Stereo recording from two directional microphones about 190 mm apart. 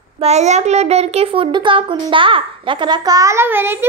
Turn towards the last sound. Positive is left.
turn(degrees=-10)  # may be behind; listen again after turning